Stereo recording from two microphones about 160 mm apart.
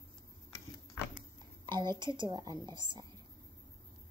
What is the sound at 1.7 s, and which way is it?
A woman's voice, 25° right (ahead or behind).